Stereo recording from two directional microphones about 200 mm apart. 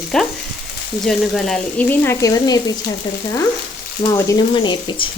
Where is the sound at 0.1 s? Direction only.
5° left (ahead or behind); by 2.7 s 20° left (ahead or behind).